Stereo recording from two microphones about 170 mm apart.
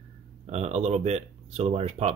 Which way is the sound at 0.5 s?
40° right (ahead or behind).